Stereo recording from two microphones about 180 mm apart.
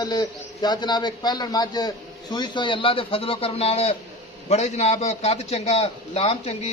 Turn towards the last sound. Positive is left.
turn(degrees=35)  # may be behind; listen again after turning